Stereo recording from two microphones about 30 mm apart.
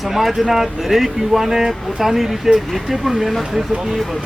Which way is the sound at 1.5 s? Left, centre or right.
Centre.